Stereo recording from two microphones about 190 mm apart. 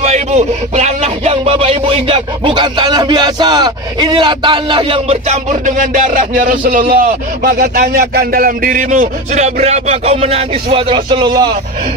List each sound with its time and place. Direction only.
0.0 s speech: 35° right (ahead or behind)